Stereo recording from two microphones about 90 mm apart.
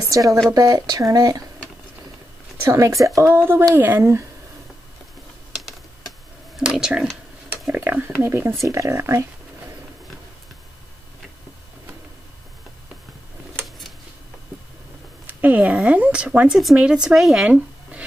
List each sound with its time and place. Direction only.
0.0 s speech: 40° right (ahead or behind)
2.7 s speech: 35° right (ahead or behind)
6.5 s a sound: 10° right (ahead or behind)
7.7 s speech: 20° right (ahead or behind)
15.2 s speech: 20° right (ahead or behind)